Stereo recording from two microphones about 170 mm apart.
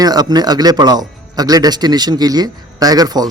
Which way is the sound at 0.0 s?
25° right (ahead or behind).